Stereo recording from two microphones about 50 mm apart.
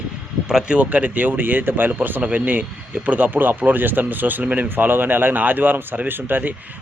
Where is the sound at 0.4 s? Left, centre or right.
Centre.